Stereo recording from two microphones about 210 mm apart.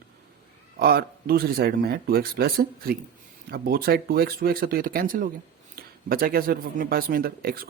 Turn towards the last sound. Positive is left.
turn(degrees=-45)  # may be behind; listen again after turning